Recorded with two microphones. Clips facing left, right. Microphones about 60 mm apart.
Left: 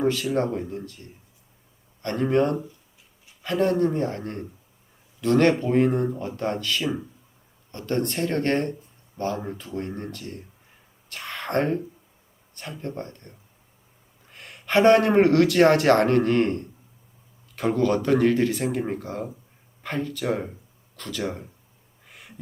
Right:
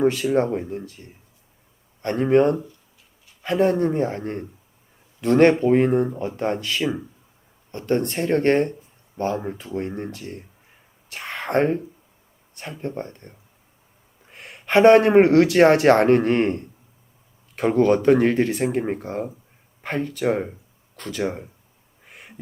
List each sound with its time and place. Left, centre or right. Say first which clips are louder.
0.2 s speech: right 4 dB; centre
2.0 s speech: right 4 dB; centre
4.0 s speech: right 3 dB; centre
5.2 s speech: right 4 dB; right
6.3 s speech: right 2 dB; right
17.9 s speech: right 4 dB; centre
20.3 s a sound: right 3 dB; centre
21.2 s speech: right 4 dB; centre
22.0 s a sound: right 2 dB; right